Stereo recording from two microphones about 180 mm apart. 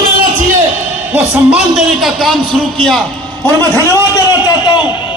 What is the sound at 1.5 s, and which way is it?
Speech, centre (ahead or behind).